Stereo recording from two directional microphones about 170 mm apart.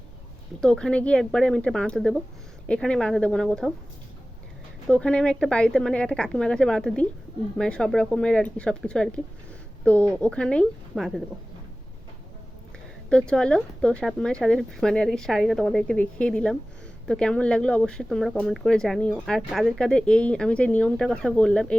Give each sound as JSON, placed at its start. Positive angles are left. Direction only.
{"t": 0.6, "sound": "speech", "side_deg": 5}
{"t": 4.9, "sound": "speech", "side_deg": 5}
{"t": 13.1, "sound": "speech", "side_deg": 5}